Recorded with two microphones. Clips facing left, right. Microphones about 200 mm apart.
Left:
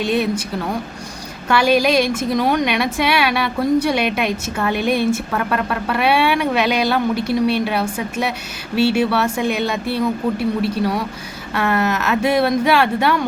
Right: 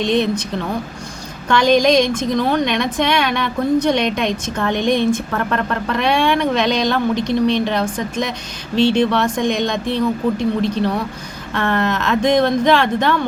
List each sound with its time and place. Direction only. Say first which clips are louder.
0.0 s a woman's voice: right 2 dB; 5° left (ahead or behind)
1.5 s a woman's voice: right 2 dB; 5° left (ahead or behind)